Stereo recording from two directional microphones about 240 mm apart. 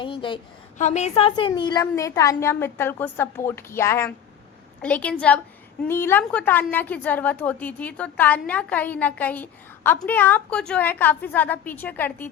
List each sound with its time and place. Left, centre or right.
0.0 s a woman's voice: left